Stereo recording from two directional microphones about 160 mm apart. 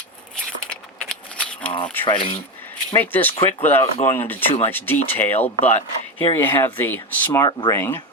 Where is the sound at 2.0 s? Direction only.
30° left (ahead or behind).